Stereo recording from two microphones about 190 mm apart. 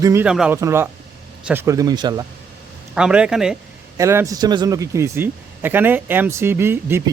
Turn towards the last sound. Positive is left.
turn(degrees=-10)  # may be behind; listen again after turning